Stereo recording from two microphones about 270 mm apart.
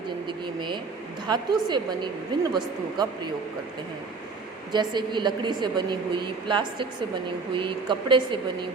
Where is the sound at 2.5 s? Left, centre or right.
Centre.